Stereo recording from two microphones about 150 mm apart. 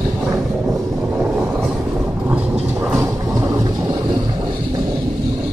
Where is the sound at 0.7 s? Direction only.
5° right (ahead or behind).